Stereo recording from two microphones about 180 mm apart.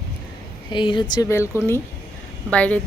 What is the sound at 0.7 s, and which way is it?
Speech, 25° left (ahead or behind).